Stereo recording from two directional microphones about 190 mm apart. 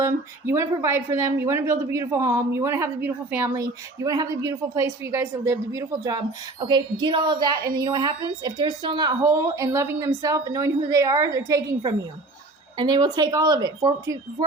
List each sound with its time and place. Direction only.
0.0 s a woman's voice: 15° right (ahead or behind)